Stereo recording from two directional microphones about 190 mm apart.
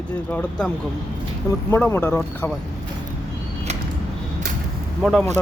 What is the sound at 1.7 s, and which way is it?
Speech, 10° left (ahead or behind).